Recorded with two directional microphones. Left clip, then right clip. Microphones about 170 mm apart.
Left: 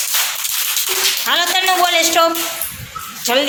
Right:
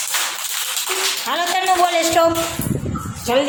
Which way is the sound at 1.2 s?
5° right (ahead or behind).